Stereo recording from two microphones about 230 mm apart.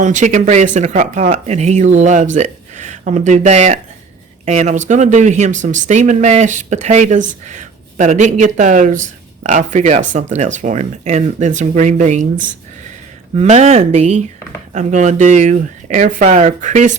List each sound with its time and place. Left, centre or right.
0.0 s speech: right
13.3 s speech: right